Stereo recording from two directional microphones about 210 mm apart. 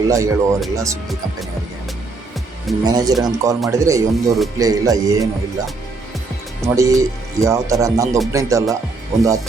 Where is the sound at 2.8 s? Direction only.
15° right (ahead or behind).